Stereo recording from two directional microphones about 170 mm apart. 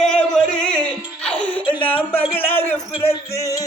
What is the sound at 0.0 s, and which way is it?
Music, 5° left (ahead or behind).